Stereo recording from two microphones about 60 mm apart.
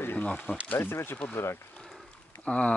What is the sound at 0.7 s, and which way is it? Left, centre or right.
Speech, left.